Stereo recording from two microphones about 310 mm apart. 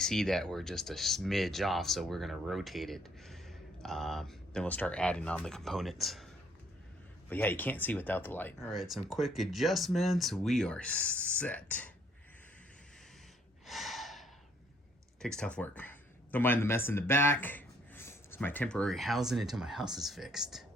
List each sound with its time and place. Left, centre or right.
0.0 s speech: centre
7.3 s speech: centre
13.7 s gasp: centre
15.2 s speech: centre